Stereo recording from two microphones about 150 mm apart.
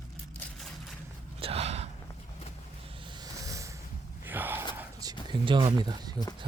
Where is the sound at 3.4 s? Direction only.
20° right (ahead or behind).